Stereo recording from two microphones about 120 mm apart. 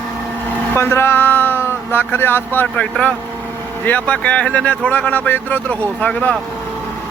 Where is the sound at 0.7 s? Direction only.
20° left (ahead or behind).